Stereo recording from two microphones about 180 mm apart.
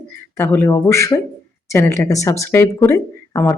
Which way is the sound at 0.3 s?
10° left (ahead or behind).